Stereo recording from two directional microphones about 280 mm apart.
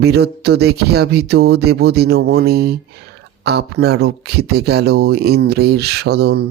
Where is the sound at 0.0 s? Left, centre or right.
Right.